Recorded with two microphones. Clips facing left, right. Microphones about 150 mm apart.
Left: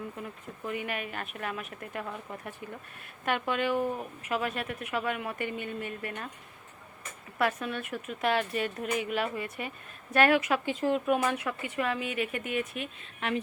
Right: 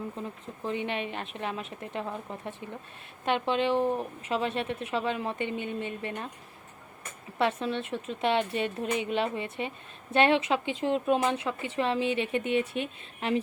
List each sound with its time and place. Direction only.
0.2 s a woman's voice: 25° right (ahead or behind)
7.3 s a woman's voice: 25° right (ahead or behind)